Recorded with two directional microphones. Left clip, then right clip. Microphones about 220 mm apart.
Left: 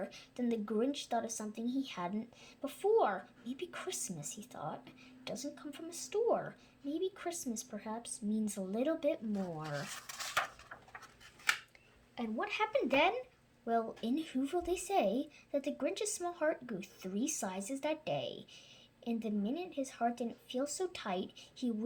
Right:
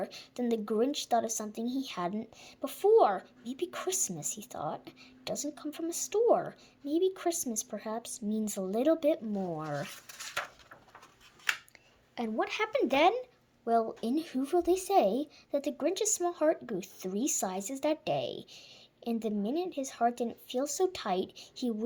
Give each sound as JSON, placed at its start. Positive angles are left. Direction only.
{"t": 0.0, "sound": "speech", "side_deg": -40}
{"t": 12.1, "sound": "a woman's voice", "side_deg": -45}